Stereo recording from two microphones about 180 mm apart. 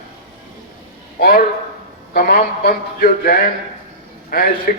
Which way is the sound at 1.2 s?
60° left (ahead or behind).